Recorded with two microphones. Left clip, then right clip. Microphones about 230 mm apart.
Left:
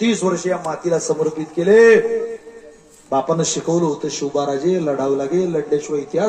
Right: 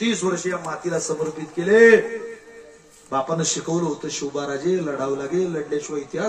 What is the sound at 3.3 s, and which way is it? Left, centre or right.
A man's voice, left.